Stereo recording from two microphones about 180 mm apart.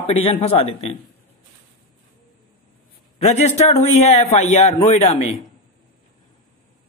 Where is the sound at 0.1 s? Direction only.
30° left (ahead or behind).